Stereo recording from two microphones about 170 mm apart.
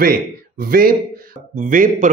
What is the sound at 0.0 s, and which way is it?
Speech, 60° right (ahead or behind).